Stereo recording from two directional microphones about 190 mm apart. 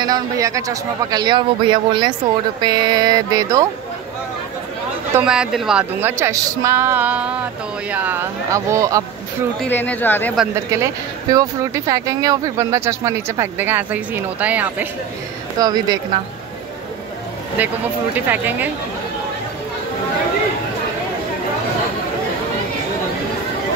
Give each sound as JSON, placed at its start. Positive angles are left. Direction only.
{"t": 0.0, "sound": "a man's voice", "side_deg": -20}
{"t": 5.1, "sound": "speech", "side_deg": -5}
{"t": 9.6, "sound": "speech", "side_deg": 10}
{"t": 10.7, "sound": "speech", "side_deg": -20}
{"t": 15.6, "sound": "a man's voice", "side_deg": -20}
{"t": 17.6, "sound": "speech", "side_deg": -10}